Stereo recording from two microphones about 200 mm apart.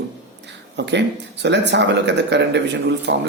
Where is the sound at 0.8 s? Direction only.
60° right (ahead or behind).